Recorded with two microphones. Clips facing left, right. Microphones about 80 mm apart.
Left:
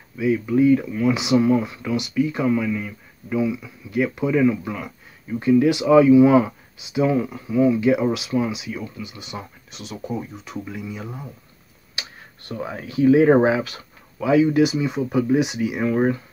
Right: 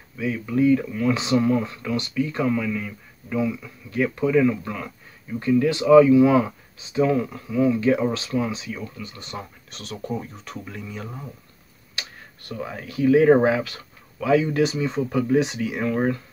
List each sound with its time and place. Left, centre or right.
0.2 s speech: centre
11.9 s speech: left